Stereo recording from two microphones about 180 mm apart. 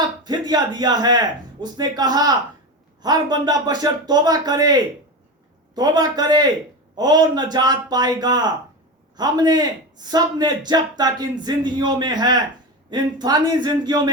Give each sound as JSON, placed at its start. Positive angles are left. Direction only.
{"t": 0.3, "sound": "speech", "side_deg": -20}